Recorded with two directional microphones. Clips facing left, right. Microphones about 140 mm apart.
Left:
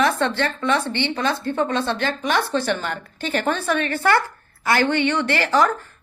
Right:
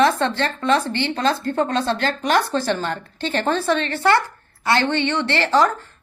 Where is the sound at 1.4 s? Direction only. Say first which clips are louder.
Right 1 dB; 45° right (ahead or behind).